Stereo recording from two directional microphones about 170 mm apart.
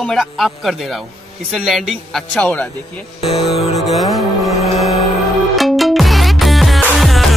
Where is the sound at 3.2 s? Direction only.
35° left (ahead or behind).